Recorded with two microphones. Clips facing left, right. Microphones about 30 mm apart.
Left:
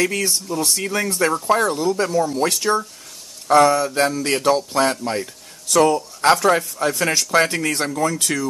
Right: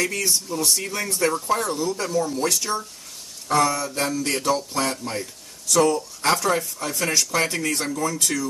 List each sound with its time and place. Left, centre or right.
0.1 s speech: centre